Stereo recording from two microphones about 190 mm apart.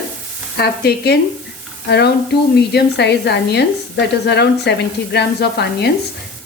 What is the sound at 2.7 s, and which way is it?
A woman's voice, 60° left (ahead or behind).